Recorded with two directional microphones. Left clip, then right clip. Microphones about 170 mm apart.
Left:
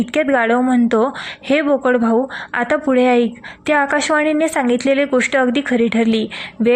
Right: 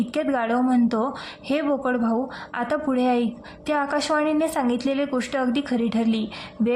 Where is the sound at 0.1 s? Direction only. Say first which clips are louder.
Left 10 dB; 30° left (ahead or behind).